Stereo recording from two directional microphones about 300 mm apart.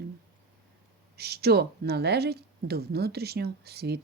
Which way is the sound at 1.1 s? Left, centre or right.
Right.